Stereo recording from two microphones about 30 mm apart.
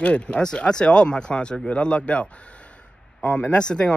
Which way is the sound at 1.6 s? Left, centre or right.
Left.